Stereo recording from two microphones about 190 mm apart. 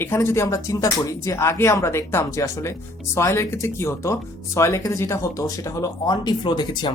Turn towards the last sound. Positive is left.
turn(degrees=20)  # may be behind; listen again after turning